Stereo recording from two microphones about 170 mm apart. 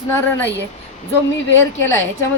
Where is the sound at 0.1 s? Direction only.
10° left (ahead or behind).